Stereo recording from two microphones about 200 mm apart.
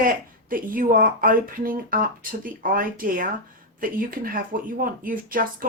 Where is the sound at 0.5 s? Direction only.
45° right (ahead or behind).